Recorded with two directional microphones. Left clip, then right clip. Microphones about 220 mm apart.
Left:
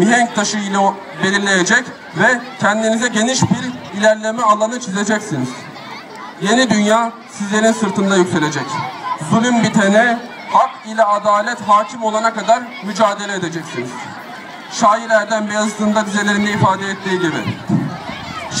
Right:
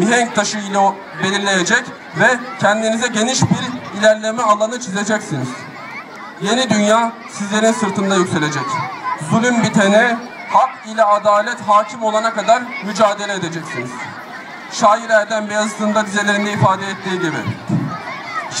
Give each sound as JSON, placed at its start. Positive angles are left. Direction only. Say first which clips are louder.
{"t": 0.0, "sound": "a man's voice", "louder": "left 1 dB", "side_deg": -35}
{"t": 14.8, "sound": "a man's voice", "louder": "even", "side_deg": -35}